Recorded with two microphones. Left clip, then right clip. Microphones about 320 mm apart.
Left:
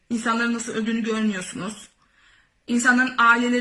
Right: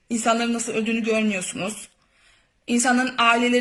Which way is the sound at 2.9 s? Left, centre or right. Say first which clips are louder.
Left 2 dB; centre.